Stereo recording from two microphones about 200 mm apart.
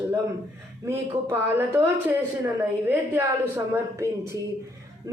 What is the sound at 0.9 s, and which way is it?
Speech, 10° right (ahead or behind).